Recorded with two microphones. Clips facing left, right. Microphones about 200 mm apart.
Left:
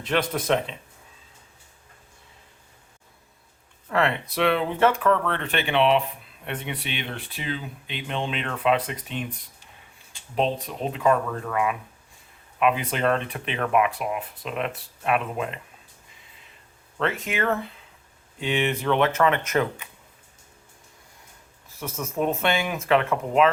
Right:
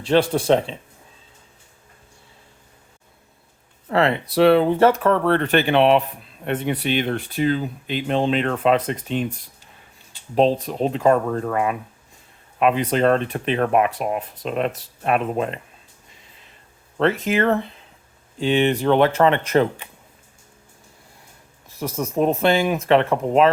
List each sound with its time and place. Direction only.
0.0 s speech: 30° right (ahead or behind)
3.8 s speech: 35° right (ahead or behind)
10.7 s speech: 35° right (ahead or behind)
17.2 s speech: 35° right (ahead or behind)
21.8 s speech: 35° right (ahead or behind)